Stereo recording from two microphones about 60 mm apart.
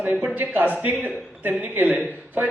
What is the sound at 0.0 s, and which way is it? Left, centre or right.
A man's voice, right.